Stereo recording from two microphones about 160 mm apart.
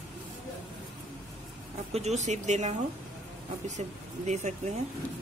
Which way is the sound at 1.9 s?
45° right (ahead or behind).